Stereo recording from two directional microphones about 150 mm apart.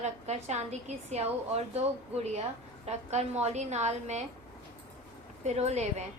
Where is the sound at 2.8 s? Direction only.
45° right (ahead or behind).